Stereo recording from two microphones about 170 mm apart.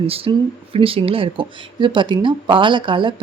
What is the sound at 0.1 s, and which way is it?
Speech, 35° right (ahead or behind).